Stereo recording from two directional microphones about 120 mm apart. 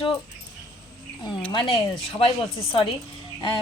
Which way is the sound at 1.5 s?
50° left (ahead or behind).